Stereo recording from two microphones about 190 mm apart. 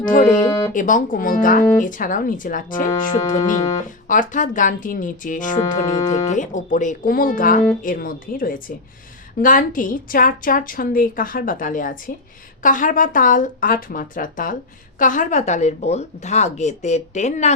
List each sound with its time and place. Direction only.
0.0 s a woman's voice: 45° left (ahead or behind)
3.2 s speech: 15° left (ahead or behind)
3.8 s a woman's voice: 45° left (ahead or behind)
5.8 s speech: 15° left (ahead or behind)
6.2 s a woman's voice: 40° left (ahead or behind)